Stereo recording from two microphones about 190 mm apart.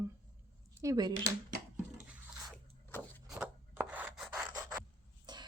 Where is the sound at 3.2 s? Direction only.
5° right (ahead or behind).